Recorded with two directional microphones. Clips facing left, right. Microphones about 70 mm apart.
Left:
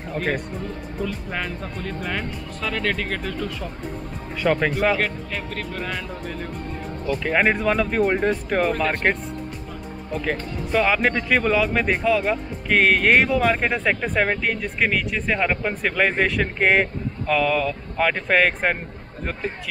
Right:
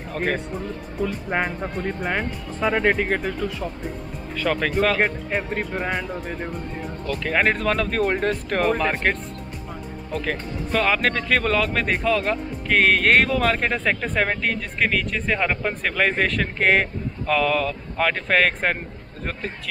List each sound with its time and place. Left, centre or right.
1.3 s speech: right; by 3.7 s centre
4.4 s speech: centre
4.9 s speech: right
7.1 s speech: centre
10.1 s speech: centre